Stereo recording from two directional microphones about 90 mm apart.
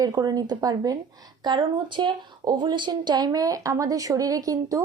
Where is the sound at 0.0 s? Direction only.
50° right (ahead or behind).